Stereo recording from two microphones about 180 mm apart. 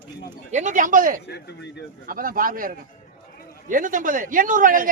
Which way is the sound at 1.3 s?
65° left (ahead or behind).